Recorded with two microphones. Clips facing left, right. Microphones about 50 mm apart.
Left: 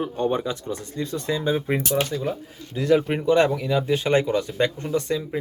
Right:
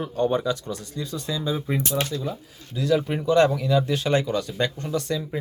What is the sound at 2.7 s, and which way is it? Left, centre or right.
Speech, left.